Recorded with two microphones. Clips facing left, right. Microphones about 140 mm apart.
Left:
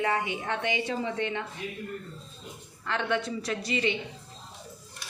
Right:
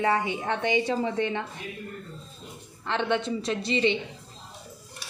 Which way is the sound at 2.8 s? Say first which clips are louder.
Right 3 dB; 25° right (ahead or behind).